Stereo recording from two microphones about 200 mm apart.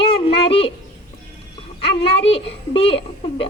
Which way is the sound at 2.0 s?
30° left (ahead or behind).